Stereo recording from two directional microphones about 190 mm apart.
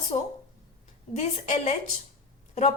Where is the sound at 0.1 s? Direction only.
35° left (ahead or behind).